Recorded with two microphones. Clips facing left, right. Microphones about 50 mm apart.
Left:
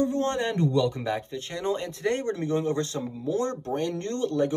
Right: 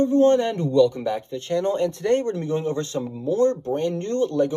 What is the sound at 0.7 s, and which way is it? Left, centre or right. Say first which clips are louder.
Speech: right 7 dB; left.